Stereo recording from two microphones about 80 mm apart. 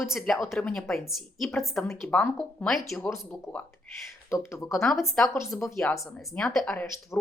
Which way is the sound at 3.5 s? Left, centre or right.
Centre.